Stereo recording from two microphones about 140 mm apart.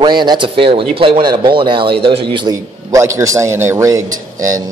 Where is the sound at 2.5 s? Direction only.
20° right (ahead or behind).